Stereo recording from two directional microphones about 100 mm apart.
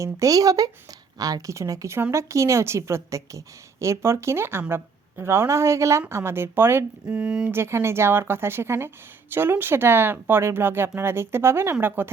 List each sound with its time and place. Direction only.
0.0 s a woman's voice: 35° right (ahead or behind)
7.2 s speech: 10° right (ahead or behind)
7.5 s a woman's voice: 25° right (ahead or behind)